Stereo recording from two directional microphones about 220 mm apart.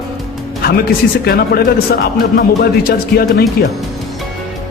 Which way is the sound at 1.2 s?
45° left (ahead or behind).